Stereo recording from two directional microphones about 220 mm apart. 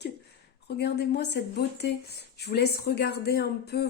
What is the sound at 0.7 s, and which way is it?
Speech, 50° left (ahead or behind).